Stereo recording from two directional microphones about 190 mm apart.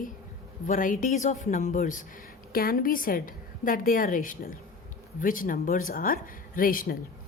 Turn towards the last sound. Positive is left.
turn(degrees=50)  # may be behind; listen again after turning